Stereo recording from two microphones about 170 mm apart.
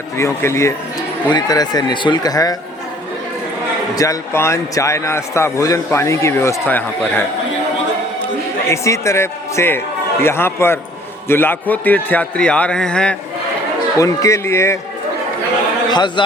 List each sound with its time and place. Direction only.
0.2 s a man's voice: 15° left (ahead or behind)
3.9 s a man's voice: 20° left (ahead or behind)
8.6 s a man's voice: 15° left (ahead or behind)
14.0 s a man's voice: 20° left (ahead or behind)
15.9 s speech: 25° left (ahead or behind)